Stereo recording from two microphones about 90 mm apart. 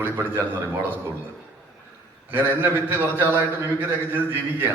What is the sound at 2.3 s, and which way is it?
A man's voice, 20° right (ahead or behind).